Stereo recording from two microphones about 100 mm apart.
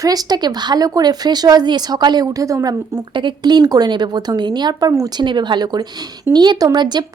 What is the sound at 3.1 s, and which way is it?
Speech, 55° right (ahead or behind).